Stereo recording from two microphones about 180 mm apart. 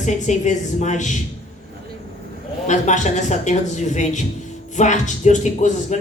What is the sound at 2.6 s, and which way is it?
A woman's voice, 40° left (ahead or behind).